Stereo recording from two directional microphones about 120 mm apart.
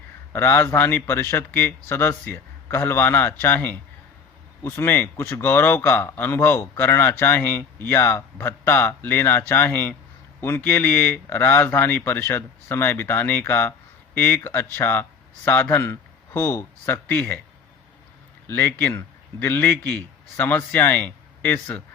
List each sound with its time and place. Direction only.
0.3 s a man's voice: 20° left (ahead or behind)
18.4 s a man's voice: 20° left (ahead or behind)